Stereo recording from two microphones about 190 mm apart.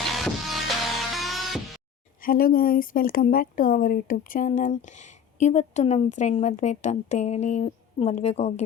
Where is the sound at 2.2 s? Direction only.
50° left (ahead or behind).